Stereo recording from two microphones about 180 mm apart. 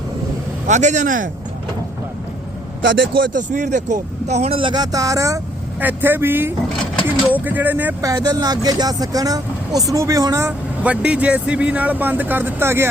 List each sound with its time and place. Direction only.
0.7 s speech: 40° right (ahead or behind)
2.8 s speech: 90° right
3.2 s speech: 45° right (ahead or behind); by 12.9 s 15° right (ahead or behind)